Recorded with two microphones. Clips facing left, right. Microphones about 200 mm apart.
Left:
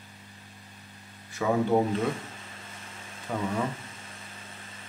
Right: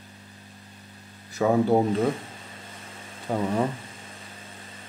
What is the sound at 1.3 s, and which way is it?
Speech, 40° right (ahead or behind).